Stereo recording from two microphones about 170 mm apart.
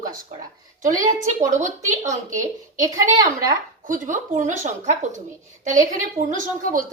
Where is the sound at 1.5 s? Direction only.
45° right (ahead or behind).